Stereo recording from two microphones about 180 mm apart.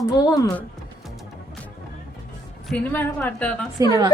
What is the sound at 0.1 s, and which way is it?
Speech, 20° left (ahead or behind).